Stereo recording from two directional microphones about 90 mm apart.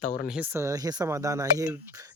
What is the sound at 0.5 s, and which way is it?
Speech, 40° right (ahead or behind).